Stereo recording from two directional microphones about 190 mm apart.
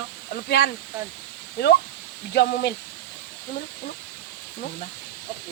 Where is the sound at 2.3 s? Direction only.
60° left (ahead or behind).